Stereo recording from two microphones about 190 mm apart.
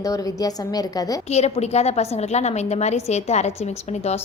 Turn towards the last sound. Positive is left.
turn(degrees=35)  # may be behind; listen again after turning